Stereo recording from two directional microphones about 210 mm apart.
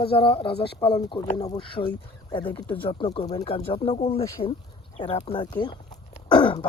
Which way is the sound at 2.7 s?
25° left (ahead or behind).